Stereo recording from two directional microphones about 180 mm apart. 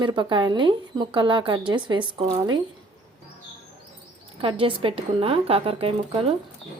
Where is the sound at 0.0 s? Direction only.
25° right (ahead or behind).